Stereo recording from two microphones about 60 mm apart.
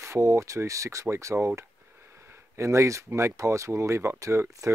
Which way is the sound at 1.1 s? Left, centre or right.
Right.